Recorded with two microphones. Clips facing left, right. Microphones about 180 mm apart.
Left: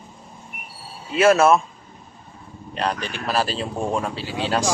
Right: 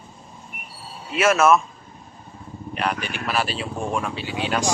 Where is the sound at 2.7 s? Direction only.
30° left (ahead or behind).